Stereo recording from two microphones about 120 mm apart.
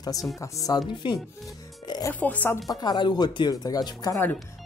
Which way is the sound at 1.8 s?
35° left (ahead or behind).